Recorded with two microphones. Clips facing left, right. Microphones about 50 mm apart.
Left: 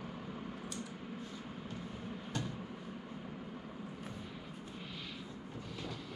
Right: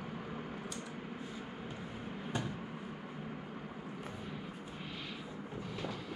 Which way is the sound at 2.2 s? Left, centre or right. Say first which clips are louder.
Right 3 dB; centre.